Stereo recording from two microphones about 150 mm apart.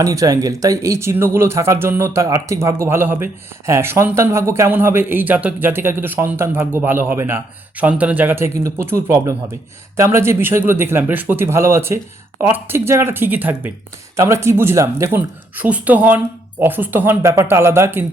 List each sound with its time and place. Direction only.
0.0 s speech: 25° right (ahead or behind)